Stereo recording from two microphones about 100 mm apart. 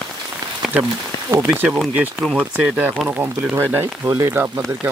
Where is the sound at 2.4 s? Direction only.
15° right (ahead or behind).